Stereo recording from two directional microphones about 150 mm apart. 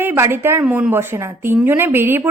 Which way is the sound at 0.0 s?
15° right (ahead or behind).